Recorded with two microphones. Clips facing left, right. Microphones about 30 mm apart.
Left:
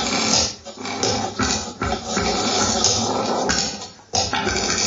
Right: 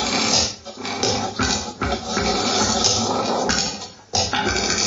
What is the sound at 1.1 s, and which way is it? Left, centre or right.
Music, centre.